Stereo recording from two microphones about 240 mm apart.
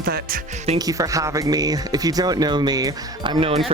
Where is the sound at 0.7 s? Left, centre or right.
Centre.